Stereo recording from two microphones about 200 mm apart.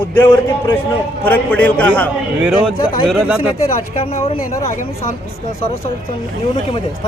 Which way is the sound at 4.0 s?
30° left (ahead or behind).